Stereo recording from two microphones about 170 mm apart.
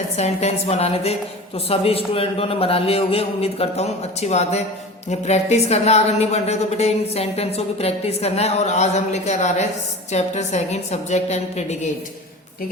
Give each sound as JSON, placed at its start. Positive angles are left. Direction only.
{"t": 0.2, "sound": "a woman's voice", "side_deg": 40}